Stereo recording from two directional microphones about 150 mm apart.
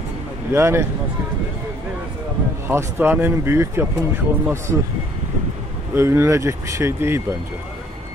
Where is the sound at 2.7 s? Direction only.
15° right (ahead or behind).